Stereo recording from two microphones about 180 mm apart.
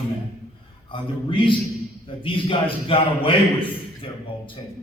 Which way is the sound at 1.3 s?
30° left (ahead or behind).